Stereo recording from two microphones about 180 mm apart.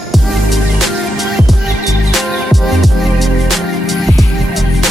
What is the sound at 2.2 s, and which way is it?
Music, centre (ahead or behind).